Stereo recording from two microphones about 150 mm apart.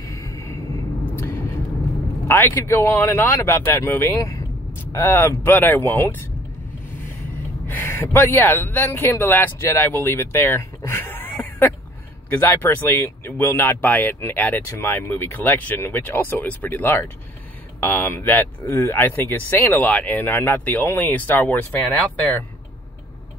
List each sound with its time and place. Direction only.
0.0 s vehicle: 20° left (ahead or behind)
2.2 s speech: 15° left (ahead or behind)
7.6 s a man's voice: 15° left (ahead or behind)